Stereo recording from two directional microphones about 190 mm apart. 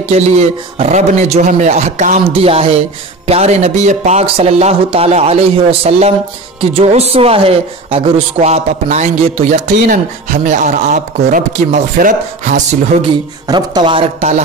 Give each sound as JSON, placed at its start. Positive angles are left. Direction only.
{"t": 0.1, "sound": "a woman's voice", "side_deg": -35}
{"t": 13.5, "sound": "speech", "side_deg": -20}